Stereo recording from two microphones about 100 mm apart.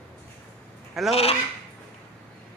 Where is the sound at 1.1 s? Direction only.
90° left.